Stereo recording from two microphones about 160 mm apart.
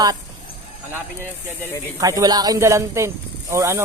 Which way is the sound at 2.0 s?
20° right (ahead or behind).